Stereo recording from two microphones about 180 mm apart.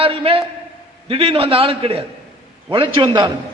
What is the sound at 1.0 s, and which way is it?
A man's voice, 30° right (ahead or behind).